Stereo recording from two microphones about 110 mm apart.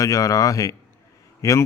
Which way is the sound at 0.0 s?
30° left (ahead or behind).